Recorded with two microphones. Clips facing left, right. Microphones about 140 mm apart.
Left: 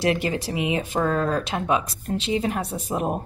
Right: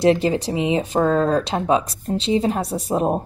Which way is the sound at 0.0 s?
30° right (ahead or behind).